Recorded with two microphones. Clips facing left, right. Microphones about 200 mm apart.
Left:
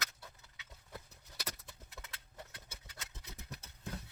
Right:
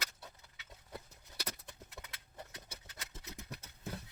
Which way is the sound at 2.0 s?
20° right (ahead or behind).